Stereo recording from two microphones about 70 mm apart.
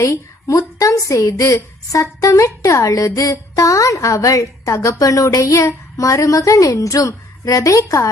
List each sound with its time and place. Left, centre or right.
0.0 s a woman's voice: left